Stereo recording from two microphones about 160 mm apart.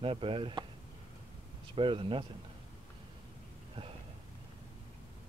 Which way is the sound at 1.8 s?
35° right (ahead or behind).